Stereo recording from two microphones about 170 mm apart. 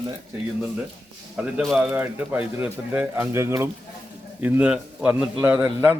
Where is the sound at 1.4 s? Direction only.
5° right (ahead or behind).